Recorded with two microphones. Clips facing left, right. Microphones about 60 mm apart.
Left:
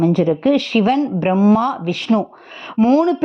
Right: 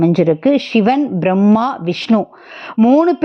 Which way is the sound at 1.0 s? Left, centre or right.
Centre.